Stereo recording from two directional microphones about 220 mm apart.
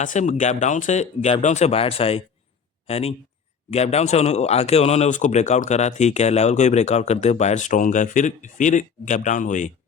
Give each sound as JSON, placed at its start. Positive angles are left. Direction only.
{"t": 0.0, "sound": "a man's voice", "side_deg": 35}